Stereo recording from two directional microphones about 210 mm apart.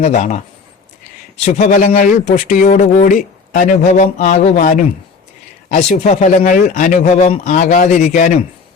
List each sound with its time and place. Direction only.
0.0 s speech: 30° left (ahead or behind)
1.5 s speech: 35° left (ahead or behind)